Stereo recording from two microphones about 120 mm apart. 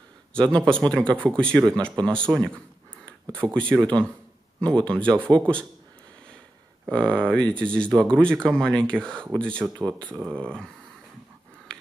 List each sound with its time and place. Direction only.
0.3 s speech: 10° left (ahead or behind)
6.9 s speech: 10° left (ahead or behind)
10.0 s speech: 15° right (ahead or behind)
10.5 s speech: 5° left (ahead or behind)